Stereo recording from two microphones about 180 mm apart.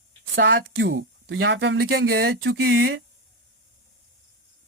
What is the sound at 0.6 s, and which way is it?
Speech, 75° right (ahead or behind).